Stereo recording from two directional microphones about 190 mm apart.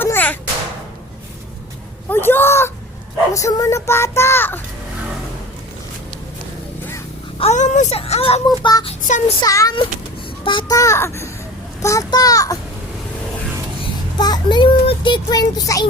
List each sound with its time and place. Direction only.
0.0 s a sound: 10° left (ahead or behind)
2.0 s a sound: 10° left (ahead or behind)
3.3 s a child's voice: 15° left (ahead or behind)
7.3 s speech: 35° left (ahead or behind)
9.0 s speech: 40° left (ahead or behind)
9.4 s a child's voice: 20° left (ahead or behind)
14.2 s a child's voice: 20° left (ahead or behind)